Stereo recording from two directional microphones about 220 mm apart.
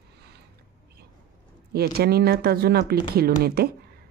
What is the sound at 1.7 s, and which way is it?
Speech, 45° right (ahead or behind).